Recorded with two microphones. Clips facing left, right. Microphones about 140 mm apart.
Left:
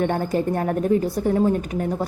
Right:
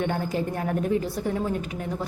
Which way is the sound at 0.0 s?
45° left (ahead or behind).